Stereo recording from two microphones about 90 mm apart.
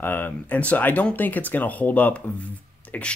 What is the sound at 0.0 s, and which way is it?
Speech, 20° left (ahead or behind).